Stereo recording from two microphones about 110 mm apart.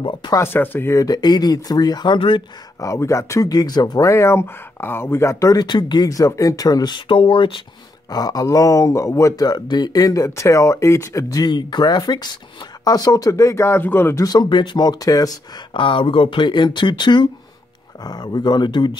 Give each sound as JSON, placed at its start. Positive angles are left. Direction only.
{"t": 0.0, "sound": "speech", "side_deg": 45}
{"t": 0.3, "sound": "speech", "side_deg": 20}
{"t": 0.9, "sound": "speech", "side_deg": 35}
{"t": 2.8, "sound": "speech", "side_deg": 25}
{"t": 8.1, "sound": "speech", "side_deg": 35}
{"t": 14.2, "sound": "speech", "side_deg": 35}
{"t": 15.7, "sound": "speech", "side_deg": 50}